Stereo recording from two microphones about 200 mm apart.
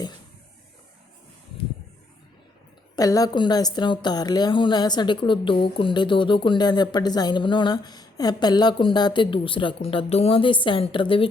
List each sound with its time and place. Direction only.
2.9 s a woman's voice: 20° left (ahead or behind)